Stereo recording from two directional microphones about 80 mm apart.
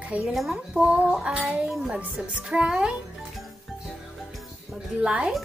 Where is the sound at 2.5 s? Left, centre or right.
Centre.